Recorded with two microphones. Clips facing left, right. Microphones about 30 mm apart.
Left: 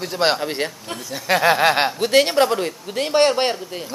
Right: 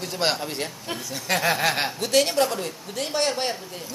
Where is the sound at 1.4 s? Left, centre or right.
Left.